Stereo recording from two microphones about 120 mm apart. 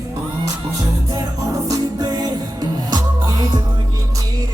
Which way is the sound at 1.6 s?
30° right (ahead or behind).